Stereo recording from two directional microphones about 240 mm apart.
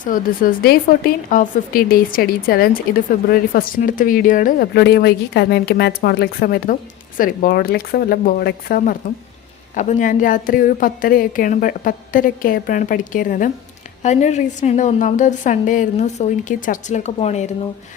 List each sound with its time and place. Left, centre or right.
0.0 s a woman's voice: left